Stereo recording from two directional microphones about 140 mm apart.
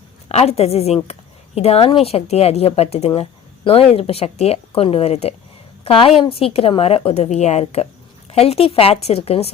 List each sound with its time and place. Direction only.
0.3 s speech: 45° left (ahead or behind)
3.2 s a sound: 40° left (ahead or behind)
3.9 s a woman's voice: 45° left (ahead or behind)